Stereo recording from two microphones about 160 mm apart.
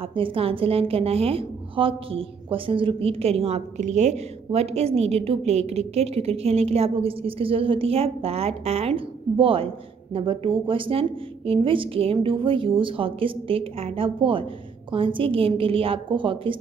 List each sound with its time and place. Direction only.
0.0 s a woman's voice: 35° right (ahead or behind)